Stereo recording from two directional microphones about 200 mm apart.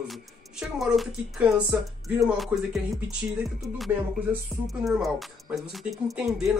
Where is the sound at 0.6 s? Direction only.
Centre (ahead or behind).